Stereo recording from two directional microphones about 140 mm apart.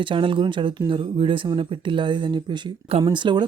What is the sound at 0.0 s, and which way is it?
Speech, 35° right (ahead or behind).